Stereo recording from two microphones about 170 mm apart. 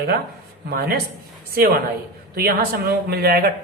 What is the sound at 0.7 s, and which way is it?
Speech, 65° right (ahead or behind).